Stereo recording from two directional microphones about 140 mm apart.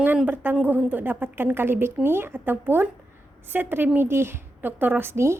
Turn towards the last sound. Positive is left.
turn(degrees=-20)  # may be behind; listen again after turning